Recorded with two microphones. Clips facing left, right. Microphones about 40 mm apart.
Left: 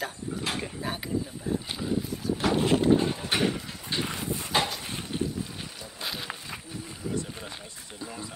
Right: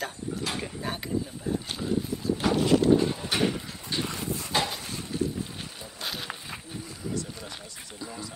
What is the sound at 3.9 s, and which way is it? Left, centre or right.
Wind, left.